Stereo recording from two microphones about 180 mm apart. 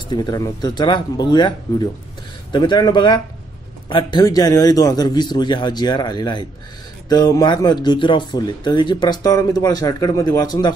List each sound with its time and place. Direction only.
0.1 s speech: 25° left (ahead or behind)
2.5 s speech: 25° left (ahead or behind)